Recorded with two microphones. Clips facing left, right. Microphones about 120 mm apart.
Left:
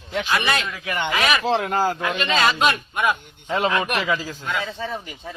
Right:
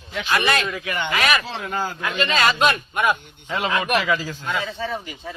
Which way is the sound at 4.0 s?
20° left (ahead or behind).